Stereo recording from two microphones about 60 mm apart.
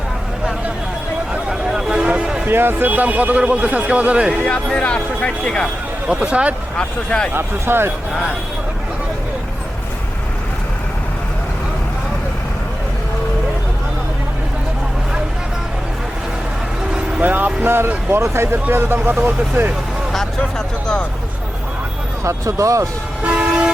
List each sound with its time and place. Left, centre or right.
1.3 s a sound: centre
2.0 s music: centre
2.5 s speech: right
4.4 s speech: left
6.1 s speech: centre
6.7 s speech: centre
7.3 s speech: right
17.2 s speech: right
20.4 s speech: centre
22.2 s speech: right
23.2 s vehicle: centre